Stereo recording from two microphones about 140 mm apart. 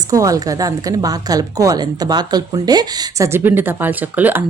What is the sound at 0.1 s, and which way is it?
Speech, 25° right (ahead or behind).